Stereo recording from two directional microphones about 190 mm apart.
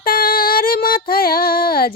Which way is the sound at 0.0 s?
50° left (ahead or behind).